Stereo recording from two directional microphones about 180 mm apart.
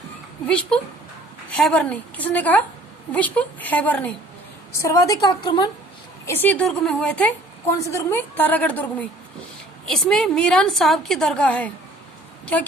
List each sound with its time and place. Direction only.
0.4 s a woman's voice: 5° left (ahead or behind); by 5.6 s 25° left (ahead or behind)
6.2 s a woman's voice: 10° left (ahead or behind)